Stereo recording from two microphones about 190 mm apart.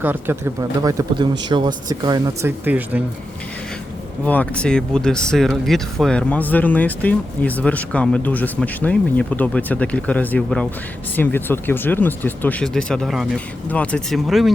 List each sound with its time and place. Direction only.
0.0 s speech: 10° right (ahead or behind)
4.3 s speech: 5° left (ahead or behind)